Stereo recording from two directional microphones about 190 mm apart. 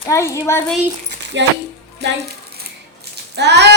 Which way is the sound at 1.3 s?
70° right (ahead or behind).